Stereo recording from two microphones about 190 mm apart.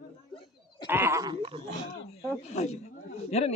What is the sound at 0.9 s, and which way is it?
Speech, 10° right (ahead or behind).